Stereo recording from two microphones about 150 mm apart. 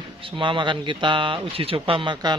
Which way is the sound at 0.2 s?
35° right (ahead or behind).